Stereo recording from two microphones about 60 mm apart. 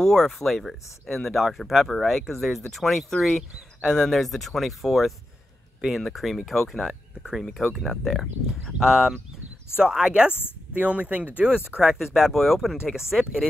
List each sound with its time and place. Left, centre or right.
0.0 s speech: centre
7.8 s speech: centre